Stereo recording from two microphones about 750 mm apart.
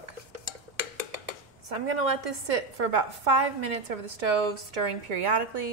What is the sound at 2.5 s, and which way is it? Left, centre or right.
A woman's voice, right.